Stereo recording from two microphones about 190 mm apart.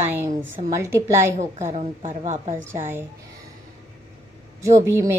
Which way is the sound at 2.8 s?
10° right (ahead or behind).